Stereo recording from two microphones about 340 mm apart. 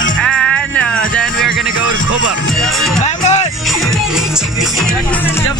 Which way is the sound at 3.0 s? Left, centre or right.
Centre.